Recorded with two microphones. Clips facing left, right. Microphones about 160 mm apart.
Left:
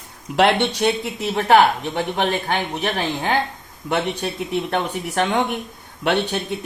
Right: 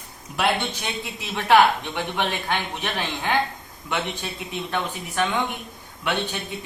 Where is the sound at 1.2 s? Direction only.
40° left (ahead or behind).